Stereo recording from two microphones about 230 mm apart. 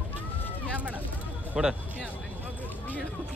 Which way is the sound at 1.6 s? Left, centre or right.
Centre.